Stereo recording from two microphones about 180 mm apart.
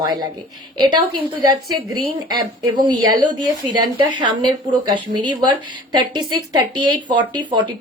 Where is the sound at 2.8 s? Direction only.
25° right (ahead or behind).